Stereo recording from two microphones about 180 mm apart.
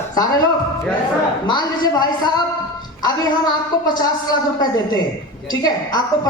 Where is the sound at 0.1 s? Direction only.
20° left (ahead or behind).